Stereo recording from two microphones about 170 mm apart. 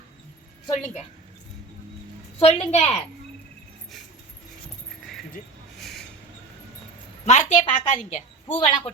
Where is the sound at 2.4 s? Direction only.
40° left (ahead or behind).